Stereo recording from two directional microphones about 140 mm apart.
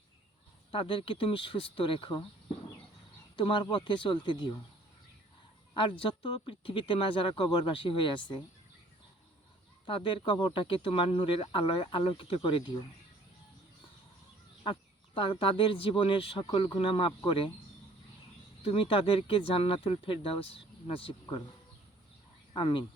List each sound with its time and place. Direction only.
0.7 s speech: 40° left (ahead or behind)
3.3 s speech: 35° left (ahead or behind)
5.7 s speech: 35° left (ahead or behind)
9.8 s speech: 35° left (ahead or behind)
14.6 s speech: 35° left (ahead or behind)
18.6 s speech: 45° left (ahead or behind)
22.5 s speech: 35° left (ahead or behind)